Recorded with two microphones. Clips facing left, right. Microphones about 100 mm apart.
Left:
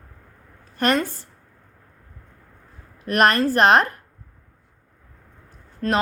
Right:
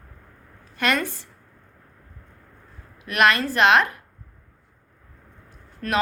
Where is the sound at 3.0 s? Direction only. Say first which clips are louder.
Left 2 dB; 40° left (ahead or behind).